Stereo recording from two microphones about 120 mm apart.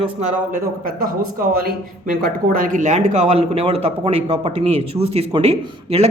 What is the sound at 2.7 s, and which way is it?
Speech, 85° right.